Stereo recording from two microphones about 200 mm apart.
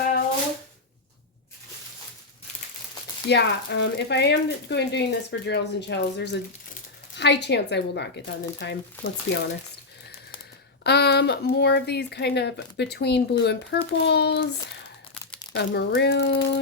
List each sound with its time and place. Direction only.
3.2 s speech: 60° left (ahead or behind)
10.8 s speech: 55° left (ahead or behind)
15.5 s speech: 60° left (ahead or behind)